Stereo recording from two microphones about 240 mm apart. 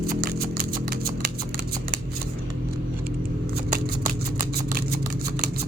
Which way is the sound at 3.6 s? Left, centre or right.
Right.